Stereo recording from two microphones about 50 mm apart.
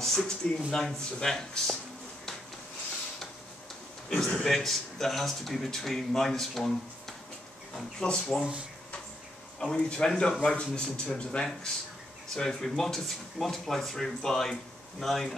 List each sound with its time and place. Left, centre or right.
0.0 s speech: centre
4.2 s speech: centre
8.2 s speech: centre
9.6 s a man's voice: left
12.4 s speech: centre